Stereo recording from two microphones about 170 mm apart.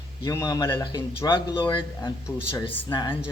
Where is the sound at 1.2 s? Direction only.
30° left (ahead or behind).